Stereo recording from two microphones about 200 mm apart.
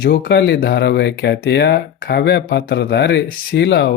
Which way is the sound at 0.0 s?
55° left (ahead or behind).